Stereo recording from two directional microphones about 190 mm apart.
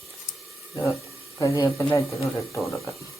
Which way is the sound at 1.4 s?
15° left (ahead or behind).